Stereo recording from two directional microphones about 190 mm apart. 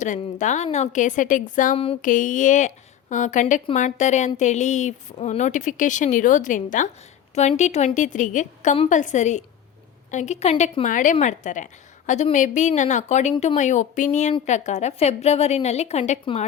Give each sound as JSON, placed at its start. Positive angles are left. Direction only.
{"t": 0.0, "sound": "a woman's voice", "side_deg": 40}
{"t": 13.3, "sound": "speech", "side_deg": 25}
{"t": 13.6, "sound": "a woman's voice", "side_deg": 40}